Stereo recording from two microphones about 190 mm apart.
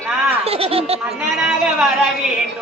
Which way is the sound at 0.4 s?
30° right (ahead or behind).